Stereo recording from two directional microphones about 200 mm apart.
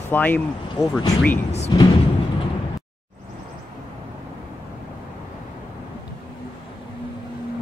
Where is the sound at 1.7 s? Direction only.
20° left (ahead or behind).